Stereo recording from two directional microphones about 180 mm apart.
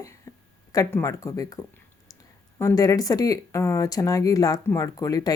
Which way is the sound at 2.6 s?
15° left (ahead or behind).